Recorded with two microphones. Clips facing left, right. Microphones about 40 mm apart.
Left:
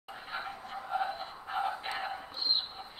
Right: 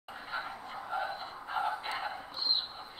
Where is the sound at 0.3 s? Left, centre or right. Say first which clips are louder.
Even; centre.